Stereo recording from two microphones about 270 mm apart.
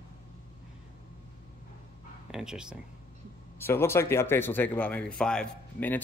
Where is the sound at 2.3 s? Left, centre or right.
Centre.